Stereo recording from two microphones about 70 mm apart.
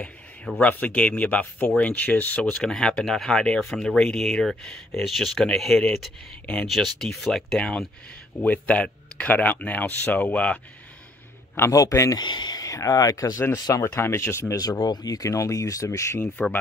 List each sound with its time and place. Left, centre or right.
0.6 s speech: left
2.4 s speech: centre
6.7 s speech: centre
7.5 s speech: centre
11.7 s speech: left
12.2 s speech: left
12.6 s speech: left
13.8 s speech: left
14.6 s speech: left
15.2 s speech: left
16.4 s speech: centre